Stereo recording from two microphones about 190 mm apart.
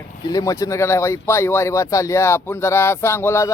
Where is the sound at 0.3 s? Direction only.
20° left (ahead or behind).